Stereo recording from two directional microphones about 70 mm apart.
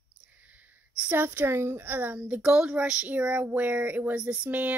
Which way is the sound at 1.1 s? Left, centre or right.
Right.